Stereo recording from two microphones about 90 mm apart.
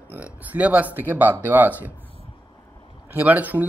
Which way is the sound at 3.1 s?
20° right (ahead or behind).